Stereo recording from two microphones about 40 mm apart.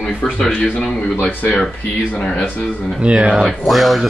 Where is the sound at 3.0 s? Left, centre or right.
Right.